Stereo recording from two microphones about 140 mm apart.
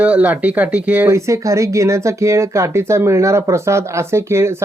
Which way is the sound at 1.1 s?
20° right (ahead or behind).